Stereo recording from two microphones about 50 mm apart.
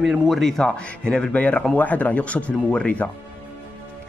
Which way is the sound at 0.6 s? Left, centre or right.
Centre.